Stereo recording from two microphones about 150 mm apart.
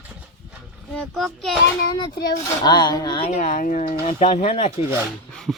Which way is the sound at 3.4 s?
60° left (ahead or behind).